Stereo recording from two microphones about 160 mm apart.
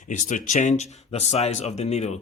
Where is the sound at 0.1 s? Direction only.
55° left (ahead or behind).